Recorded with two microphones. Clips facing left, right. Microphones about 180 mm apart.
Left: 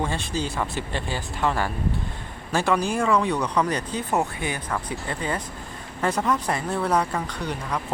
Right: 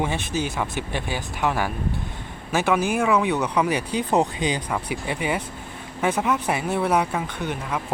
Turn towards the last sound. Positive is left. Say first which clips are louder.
# right 1 dB
turn(degrees=-5)  # may be behind; listen again after turning